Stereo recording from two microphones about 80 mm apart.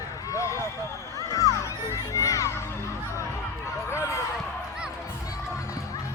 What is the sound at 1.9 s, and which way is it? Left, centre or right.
Crowd, left.